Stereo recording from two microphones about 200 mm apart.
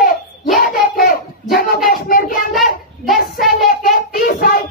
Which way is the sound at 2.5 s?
Centre (ahead or behind).